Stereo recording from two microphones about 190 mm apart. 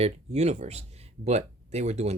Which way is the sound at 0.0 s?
35° right (ahead or behind).